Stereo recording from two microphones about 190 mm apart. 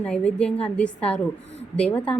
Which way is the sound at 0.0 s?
5° left (ahead or behind).